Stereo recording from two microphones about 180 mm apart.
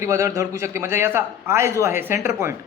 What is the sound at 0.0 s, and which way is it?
Speech, 15° right (ahead or behind).